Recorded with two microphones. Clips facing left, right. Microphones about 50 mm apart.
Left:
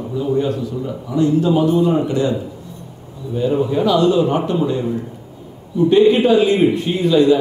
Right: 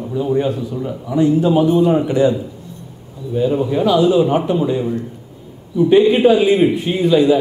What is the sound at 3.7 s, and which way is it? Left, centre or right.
A man's voice, centre.